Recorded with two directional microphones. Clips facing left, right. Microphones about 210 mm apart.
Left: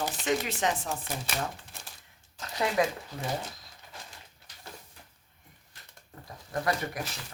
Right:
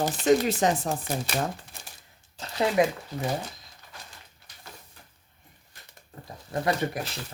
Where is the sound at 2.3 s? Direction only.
30° right (ahead or behind).